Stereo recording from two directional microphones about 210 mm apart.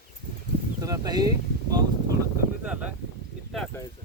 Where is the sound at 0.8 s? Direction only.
15° right (ahead or behind).